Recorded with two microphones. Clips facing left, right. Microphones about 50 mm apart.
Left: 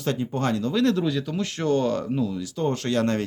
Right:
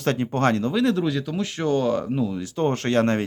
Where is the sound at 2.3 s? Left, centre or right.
Right.